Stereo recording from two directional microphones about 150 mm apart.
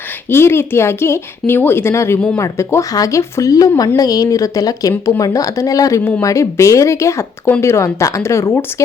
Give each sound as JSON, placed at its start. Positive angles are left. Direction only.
{"t": 0.3, "sound": "a woman's voice", "side_deg": 15}